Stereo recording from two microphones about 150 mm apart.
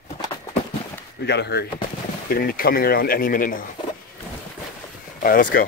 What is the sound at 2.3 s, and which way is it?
Speech, 75° left (ahead or behind).